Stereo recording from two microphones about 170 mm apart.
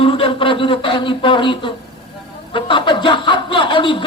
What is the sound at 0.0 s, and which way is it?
Speech, 30° left (ahead or behind).